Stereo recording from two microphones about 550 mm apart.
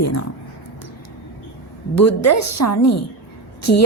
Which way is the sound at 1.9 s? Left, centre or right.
Left.